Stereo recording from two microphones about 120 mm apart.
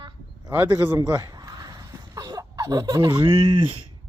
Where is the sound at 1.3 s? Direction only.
30° right (ahead or behind).